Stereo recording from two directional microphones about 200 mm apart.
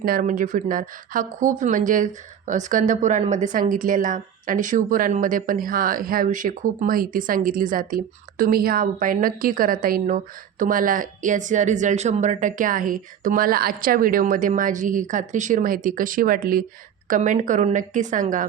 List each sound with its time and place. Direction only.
0.0 s a woman's voice: 45° right (ahead or behind)